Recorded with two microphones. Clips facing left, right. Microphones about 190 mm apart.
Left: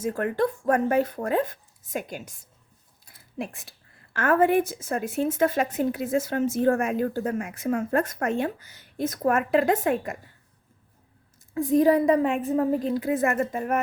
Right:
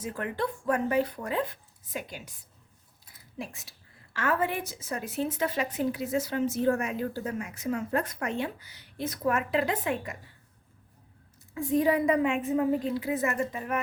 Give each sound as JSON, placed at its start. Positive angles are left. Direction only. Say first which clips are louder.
{"t": 0.0, "sound": "a woman's voice", "louder": "left 7 dB", "side_deg": 45}
{"t": 11.5, "sound": "a woman's voice", "louder": "left 6 dB", "side_deg": 40}